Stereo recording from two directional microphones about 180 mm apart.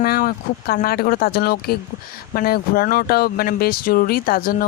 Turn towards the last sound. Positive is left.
turn(degrees=55)  # may be behind; listen again after turning